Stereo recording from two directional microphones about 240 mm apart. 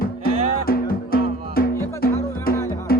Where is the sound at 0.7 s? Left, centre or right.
Left.